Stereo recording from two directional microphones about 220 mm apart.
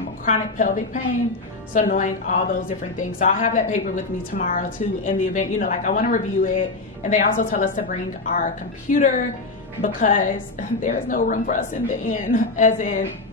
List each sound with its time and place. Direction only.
0.2 s a woman's voice: 35° left (ahead or behind)